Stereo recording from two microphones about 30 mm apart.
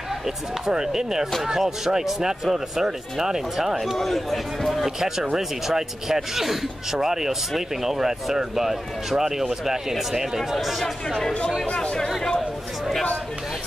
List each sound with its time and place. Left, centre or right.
0.7 s speech: centre
4.0 s speech: centre
5.0 s speech: centre
11.6 s speech: left
12.4 s chatter: centre